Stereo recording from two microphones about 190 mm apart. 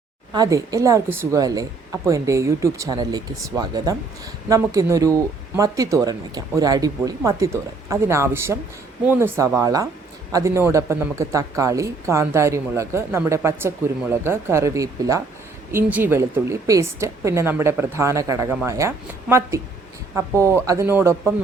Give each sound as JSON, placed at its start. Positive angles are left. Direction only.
{"t": 0.3, "sound": "a woman's voice", "side_deg": -20}